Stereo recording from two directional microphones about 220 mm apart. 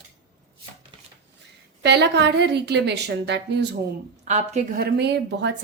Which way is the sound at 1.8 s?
50° right (ahead or behind).